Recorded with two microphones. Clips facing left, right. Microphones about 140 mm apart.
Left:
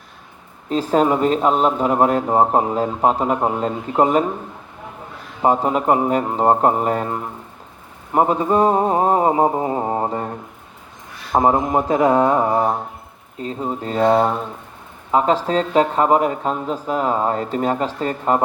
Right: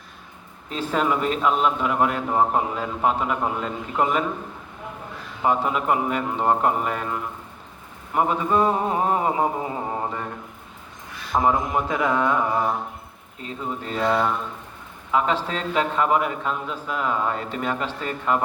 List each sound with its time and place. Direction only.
0.7 s a man's voice: 40° left (ahead or behind)
5.4 s a man's voice: 40° left (ahead or behind)